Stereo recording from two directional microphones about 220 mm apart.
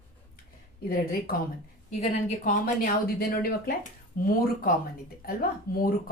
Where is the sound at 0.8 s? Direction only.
40° left (ahead or behind).